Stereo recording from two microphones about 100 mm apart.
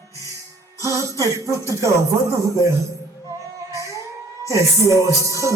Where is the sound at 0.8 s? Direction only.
30° right (ahead or behind).